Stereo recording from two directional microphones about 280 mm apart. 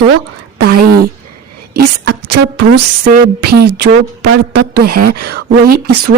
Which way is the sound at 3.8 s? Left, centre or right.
Right.